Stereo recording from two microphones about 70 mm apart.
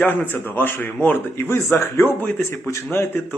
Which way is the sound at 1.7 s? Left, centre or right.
Left.